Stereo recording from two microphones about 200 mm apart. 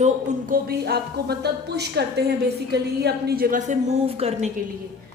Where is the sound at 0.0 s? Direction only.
40° right (ahead or behind).